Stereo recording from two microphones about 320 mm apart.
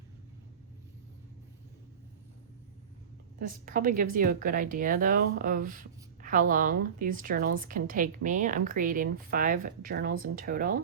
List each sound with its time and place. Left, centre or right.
3.4 s speech: right